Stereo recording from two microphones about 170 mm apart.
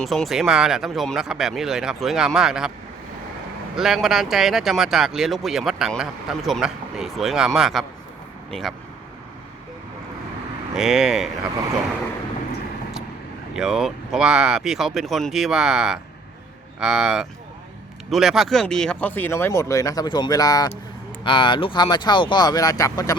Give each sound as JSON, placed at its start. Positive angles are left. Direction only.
{"t": 0.0, "sound": "speech", "side_deg": 0}
{"t": 3.8, "sound": "speech", "side_deg": 0}
{"t": 10.8, "sound": "speech", "side_deg": -5}
{"t": 13.6, "sound": "speech", "side_deg": 0}